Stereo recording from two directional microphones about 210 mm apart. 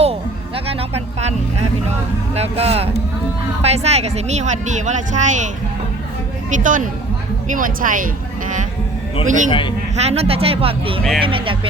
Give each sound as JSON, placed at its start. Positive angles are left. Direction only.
{"t": 0.0, "sound": "a sound", "side_deg": -25}
{"t": 1.9, "sound": "speech", "side_deg": -30}
{"t": 6.5, "sound": "speech", "side_deg": -40}
{"t": 9.2, "sound": "speech", "side_deg": -35}
{"t": 9.5, "sound": "a man's voice", "side_deg": 20}
{"t": 9.9, "sound": "speech", "side_deg": -30}